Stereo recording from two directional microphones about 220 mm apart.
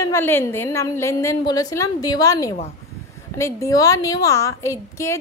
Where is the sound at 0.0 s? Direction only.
10° left (ahead or behind).